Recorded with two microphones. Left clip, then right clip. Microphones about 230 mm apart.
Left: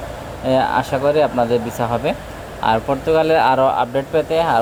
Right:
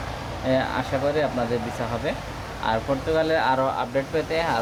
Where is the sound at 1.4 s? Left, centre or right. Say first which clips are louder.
Left 9 dB; left.